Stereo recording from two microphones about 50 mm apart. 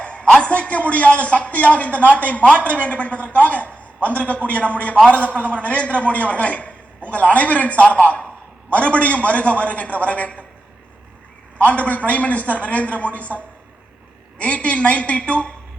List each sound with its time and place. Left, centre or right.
0.0 s a man's voice: left
3.8 s a sound: left
4.4 s a man's voice: left
11.5 s a man's voice: left